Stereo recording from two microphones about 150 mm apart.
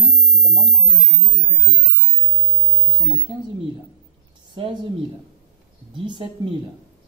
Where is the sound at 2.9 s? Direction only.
30° right (ahead or behind).